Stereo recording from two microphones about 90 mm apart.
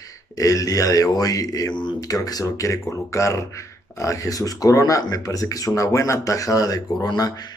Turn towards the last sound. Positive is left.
turn(degrees=45)  # may be behind; listen again after turning